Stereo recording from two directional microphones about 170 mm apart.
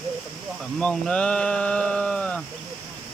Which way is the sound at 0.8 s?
5° left (ahead or behind).